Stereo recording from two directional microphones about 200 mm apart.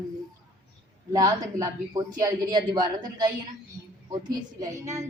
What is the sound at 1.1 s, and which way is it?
Speech, 20° right (ahead or behind).